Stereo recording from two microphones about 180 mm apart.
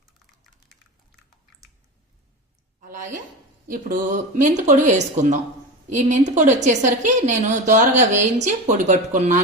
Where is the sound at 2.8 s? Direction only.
45° right (ahead or behind).